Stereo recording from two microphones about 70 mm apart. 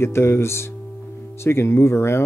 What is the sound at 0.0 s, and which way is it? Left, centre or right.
Speech, left.